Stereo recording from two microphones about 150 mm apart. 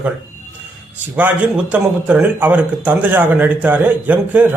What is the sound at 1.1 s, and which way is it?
A man's voice, 10° right (ahead or behind).